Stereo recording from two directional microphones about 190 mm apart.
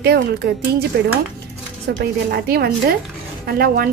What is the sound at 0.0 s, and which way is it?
Speech, 55° right (ahead or behind).